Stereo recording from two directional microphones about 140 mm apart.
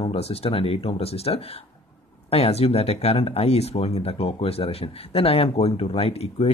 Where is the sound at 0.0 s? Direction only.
45° left (ahead or behind).